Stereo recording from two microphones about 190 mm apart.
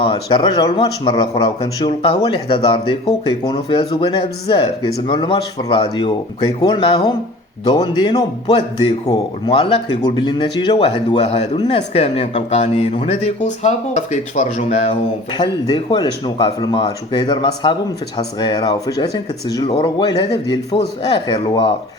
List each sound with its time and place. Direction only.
0.0 s speech: 25° left (ahead or behind)
15.4 s speech: 20° left (ahead or behind)